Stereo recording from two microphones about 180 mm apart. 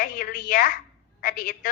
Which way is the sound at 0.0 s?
50° left (ahead or behind).